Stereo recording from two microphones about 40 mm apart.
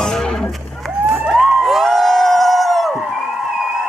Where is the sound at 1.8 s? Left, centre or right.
Centre.